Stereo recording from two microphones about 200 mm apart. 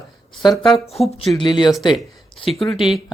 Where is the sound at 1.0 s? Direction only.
30° left (ahead or behind).